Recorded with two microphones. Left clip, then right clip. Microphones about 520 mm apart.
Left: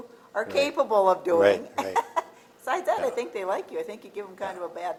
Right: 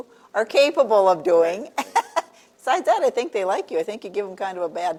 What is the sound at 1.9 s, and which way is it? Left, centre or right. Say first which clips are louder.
A woman's voice: right 6 dB; right.